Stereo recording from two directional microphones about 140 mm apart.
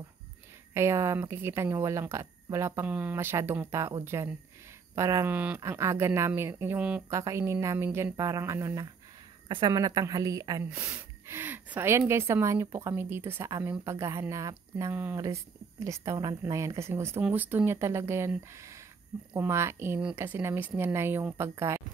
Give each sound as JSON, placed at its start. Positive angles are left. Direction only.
{"t": 0.7, "sound": "speech", "side_deg": -20}
{"t": 9.5, "sound": "speech", "side_deg": -30}
{"t": 10.7, "sound": "speech", "side_deg": -10}